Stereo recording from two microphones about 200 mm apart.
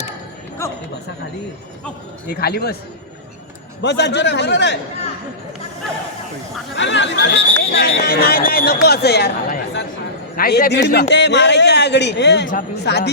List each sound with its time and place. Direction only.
2.3 s speech: 50° left (ahead or behind)
3.8 s speech: 60° left (ahead or behind)
6.7 s speech: 65° left (ahead or behind)